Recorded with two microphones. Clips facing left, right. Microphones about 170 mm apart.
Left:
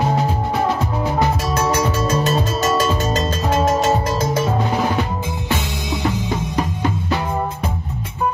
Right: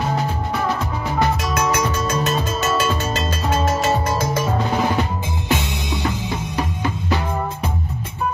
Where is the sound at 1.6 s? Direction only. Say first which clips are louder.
Left 3 dB; 35° left (ahead or behind).